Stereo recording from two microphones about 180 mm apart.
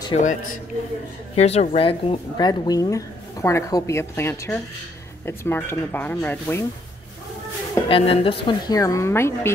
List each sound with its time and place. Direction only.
0.1 s a man's voice: 45° left (ahead or behind); by 6.6 s 10° left (ahead or behind)
7.9 s speech: 30° left (ahead or behind); by 9.5 s 15° left (ahead or behind)